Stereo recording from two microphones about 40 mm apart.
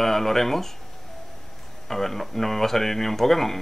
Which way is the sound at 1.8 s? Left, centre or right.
Centre.